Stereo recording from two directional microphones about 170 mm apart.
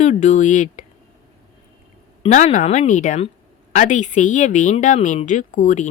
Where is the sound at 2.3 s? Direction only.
45° left (ahead or behind).